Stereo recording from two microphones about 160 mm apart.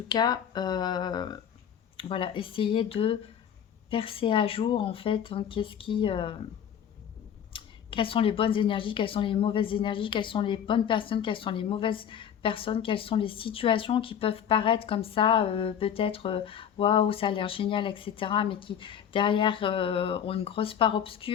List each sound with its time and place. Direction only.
0.1 s speech: 25° left (ahead or behind)
7.5 s speech: 30° left (ahead or behind)